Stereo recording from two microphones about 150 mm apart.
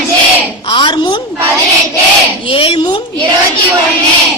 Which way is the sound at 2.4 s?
40° left (ahead or behind).